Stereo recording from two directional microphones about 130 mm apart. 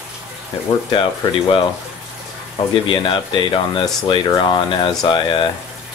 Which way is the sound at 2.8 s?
40° left (ahead or behind).